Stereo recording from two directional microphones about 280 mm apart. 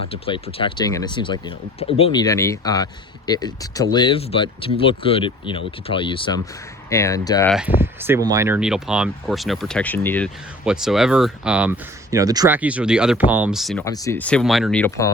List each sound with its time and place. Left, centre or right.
0.1 s speech: centre
7.8 s speech: centre
13.8 s speech: centre